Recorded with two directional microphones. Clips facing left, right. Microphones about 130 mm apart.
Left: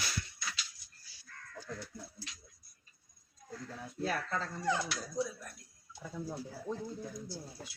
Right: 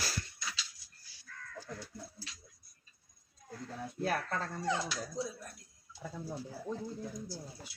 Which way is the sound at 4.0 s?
50° right (ahead or behind).